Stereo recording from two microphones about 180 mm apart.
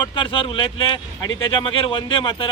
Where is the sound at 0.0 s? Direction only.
25° left (ahead or behind).